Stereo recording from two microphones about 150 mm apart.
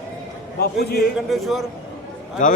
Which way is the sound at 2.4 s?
60° left (ahead or behind).